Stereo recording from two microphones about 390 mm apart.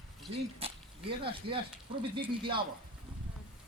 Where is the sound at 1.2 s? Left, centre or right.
Centre.